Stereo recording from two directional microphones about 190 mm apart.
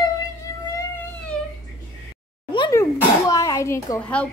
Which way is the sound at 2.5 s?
20° left (ahead or behind).